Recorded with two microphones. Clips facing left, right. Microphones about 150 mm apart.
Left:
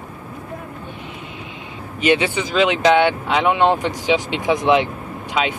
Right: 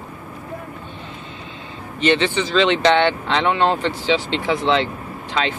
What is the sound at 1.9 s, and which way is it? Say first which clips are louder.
Speech: even; 10° left (ahead or behind).